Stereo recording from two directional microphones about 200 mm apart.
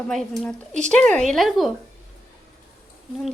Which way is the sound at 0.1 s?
Centre (ahead or behind).